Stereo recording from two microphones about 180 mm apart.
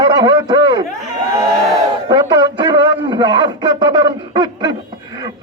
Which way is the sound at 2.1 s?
25° right (ahead or behind).